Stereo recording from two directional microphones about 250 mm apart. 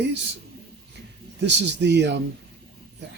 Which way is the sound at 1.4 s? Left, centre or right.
Right.